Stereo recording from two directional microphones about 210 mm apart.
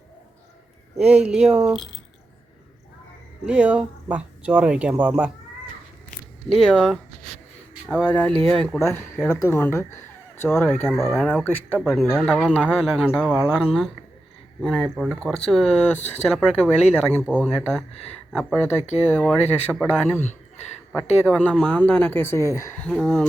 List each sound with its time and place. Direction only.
0.9 s speech: 5° right (ahead or behind)
3.4 s speech: 5° right (ahead or behind)
6.5 s speech: 5° left (ahead or behind)
10.7 s speech: centre (ahead or behind)
13.3 s speech: 10° right (ahead or behind)
13.7 s speech: centre (ahead or behind)
16.0 s speech: 30° left (ahead or behind)
16.3 s speech: centre (ahead or behind)